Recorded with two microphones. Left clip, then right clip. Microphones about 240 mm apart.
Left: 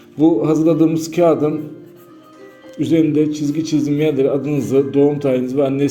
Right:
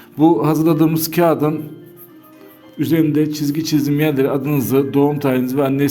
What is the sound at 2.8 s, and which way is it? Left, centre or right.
A man's voice, right.